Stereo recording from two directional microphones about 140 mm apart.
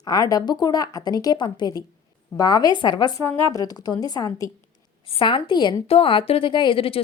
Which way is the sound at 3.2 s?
15° left (ahead or behind).